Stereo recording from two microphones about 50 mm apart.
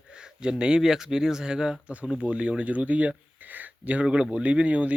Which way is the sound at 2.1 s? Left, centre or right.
Right.